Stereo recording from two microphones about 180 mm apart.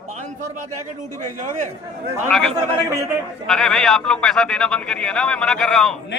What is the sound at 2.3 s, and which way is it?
Speech, 5° left (ahead or behind).